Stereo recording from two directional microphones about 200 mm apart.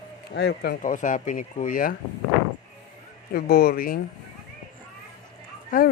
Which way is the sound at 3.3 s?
50° left (ahead or behind).